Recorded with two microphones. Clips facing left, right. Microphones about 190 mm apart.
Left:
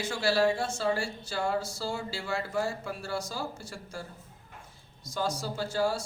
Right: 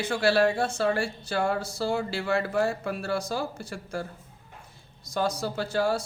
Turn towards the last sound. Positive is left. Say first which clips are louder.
# right 3 dB
turn(degrees=-60)  # may be behind; listen again after turning